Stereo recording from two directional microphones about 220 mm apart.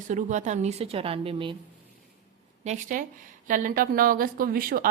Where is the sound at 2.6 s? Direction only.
35° right (ahead or behind).